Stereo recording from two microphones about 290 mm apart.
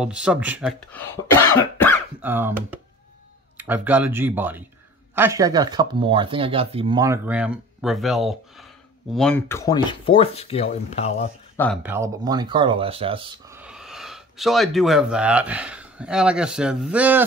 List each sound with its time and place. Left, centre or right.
0.0 s speech: centre
2.2 s speech: centre; by 11.2 s left
11.5 s speech: centre
11.8 s speech: centre
13.6 s speech: centre